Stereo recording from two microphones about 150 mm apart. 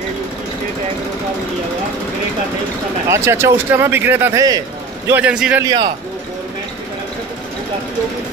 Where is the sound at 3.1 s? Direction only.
20° right (ahead or behind).